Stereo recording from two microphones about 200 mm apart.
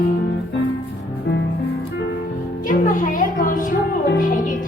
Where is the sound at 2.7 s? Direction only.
40° left (ahead or behind).